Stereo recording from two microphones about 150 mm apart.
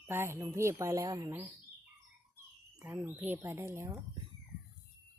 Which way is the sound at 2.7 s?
15° right (ahead or behind).